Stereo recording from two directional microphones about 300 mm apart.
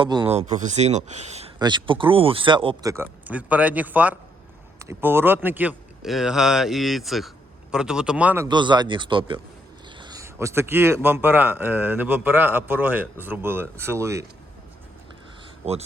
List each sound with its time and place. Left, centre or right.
0.0 s speech: centre